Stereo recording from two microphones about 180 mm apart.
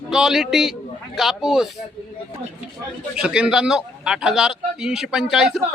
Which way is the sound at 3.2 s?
5° right (ahead or behind).